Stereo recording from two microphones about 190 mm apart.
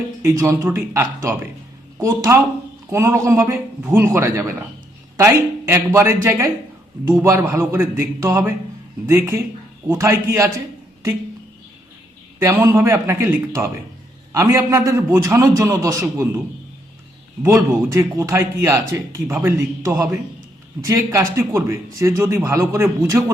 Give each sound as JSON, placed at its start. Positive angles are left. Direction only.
{"t": 0.3, "sound": "speech", "side_deg": -15}
{"t": 12.4, "sound": "speech", "side_deg": -15}
{"t": 17.4, "sound": "speech", "side_deg": -15}